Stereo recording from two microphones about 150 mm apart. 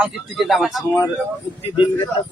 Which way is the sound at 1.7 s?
30° left (ahead or behind).